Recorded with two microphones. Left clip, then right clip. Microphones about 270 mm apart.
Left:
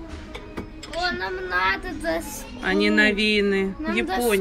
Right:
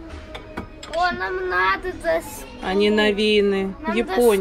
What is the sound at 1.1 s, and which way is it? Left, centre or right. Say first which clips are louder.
Speech: right 3 dB; left.